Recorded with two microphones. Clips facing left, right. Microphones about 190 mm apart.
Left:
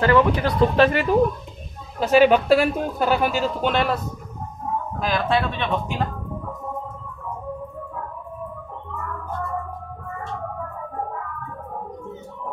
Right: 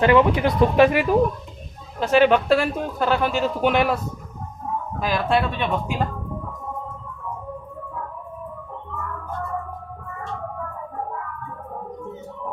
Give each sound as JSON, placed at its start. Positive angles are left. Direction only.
{"t": 0.0, "sound": "speech", "side_deg": -20}
{"t": 2.0, "sound": "speech", "side_deg": 5}
{"t": 3.6, "sound": "speech", "side_deg": -10}
{"t": 5.0, "sound": "speech", "side_deg": -5}